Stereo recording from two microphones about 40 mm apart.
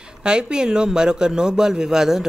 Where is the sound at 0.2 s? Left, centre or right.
Centre.